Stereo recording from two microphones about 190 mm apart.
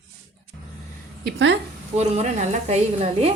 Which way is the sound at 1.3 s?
75° right (ahead or behind).